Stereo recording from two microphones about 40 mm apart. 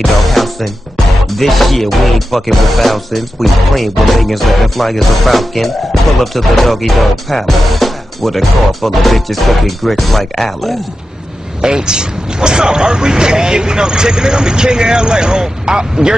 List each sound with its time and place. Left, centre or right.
0.3 s music: centre
11.6 s speech: centre